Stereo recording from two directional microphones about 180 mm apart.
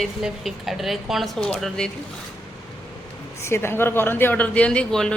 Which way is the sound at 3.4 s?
15° left (ahead or behind).